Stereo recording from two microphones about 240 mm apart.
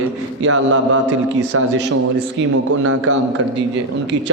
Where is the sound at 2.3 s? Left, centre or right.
Right.